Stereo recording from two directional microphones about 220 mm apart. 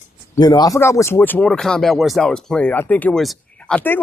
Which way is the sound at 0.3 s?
20° left (ahead or behind).